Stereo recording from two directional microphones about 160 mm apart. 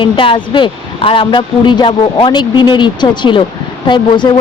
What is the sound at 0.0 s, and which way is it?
Speech, 30° left (ahead or behind).